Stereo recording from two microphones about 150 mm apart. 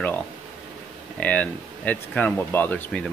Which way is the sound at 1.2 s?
10° left (ahead or behind).